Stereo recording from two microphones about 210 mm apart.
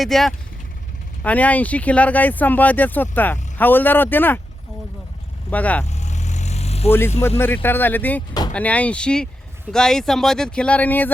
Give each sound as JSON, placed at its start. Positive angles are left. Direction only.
{"t": 0.0, "sound": "speech", "side_deg": 0}
{"t": 5.5, "sound": "speech", "side_deg": 5}
{"t": 5.8, "sound": "vehicle", "side_deg": 35}
{"t": 7.2, "sound": "speech", "side_deg": 10}